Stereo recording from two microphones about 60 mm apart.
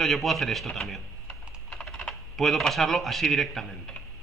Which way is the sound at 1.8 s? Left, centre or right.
Centre.